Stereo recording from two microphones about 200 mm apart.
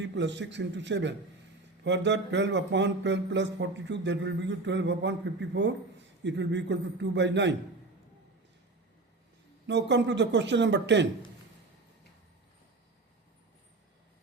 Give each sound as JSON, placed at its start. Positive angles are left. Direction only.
{"t": 0.0, "sound": "speech", "side_deg": -60}
{"t": 9.6, "sound": "speech", "side_deg": -60}